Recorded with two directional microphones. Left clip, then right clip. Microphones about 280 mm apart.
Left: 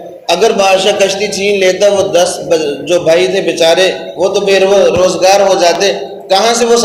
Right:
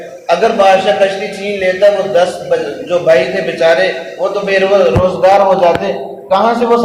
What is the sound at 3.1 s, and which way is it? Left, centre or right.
Speech, left.